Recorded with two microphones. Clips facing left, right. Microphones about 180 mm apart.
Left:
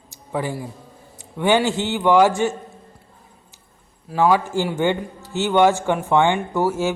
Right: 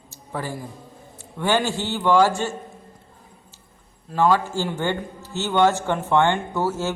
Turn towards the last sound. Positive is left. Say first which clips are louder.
# left 4 dB
turn(degrees=15)  # may be behind; listen again after turning